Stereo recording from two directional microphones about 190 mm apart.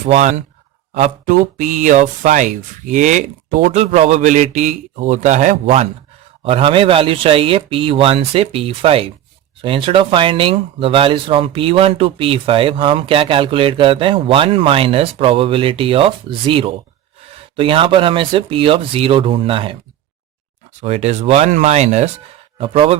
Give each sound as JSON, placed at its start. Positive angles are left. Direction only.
{"t": 0.0, "sound": "speech", "side_deg": -35}
{"t": 20.8, "sound": "speech", "side_deg": -35}